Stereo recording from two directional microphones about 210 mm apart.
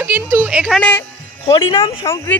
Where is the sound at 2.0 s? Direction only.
15° left (ahead or behind).